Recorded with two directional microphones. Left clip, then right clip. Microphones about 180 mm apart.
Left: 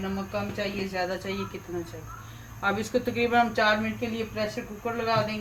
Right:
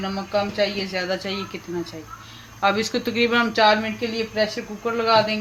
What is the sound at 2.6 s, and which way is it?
Speech, 55° right (ahead or behind).